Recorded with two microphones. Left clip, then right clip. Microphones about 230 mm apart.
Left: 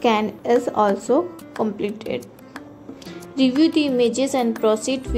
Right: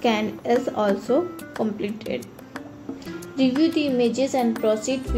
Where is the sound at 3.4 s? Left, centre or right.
Left.